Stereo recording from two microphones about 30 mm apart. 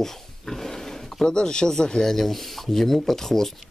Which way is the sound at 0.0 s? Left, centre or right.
Centre.